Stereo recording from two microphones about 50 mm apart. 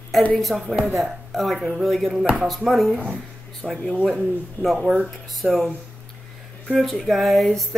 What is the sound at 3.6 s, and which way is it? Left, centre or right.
Speech, right.